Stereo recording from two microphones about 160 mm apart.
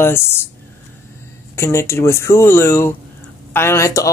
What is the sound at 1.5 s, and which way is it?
Speech, 15° left (ahead or behind).